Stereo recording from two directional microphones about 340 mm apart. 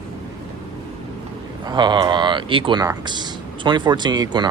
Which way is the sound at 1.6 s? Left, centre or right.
Centre.